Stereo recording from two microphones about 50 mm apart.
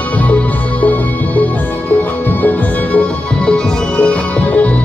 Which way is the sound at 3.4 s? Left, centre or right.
Left.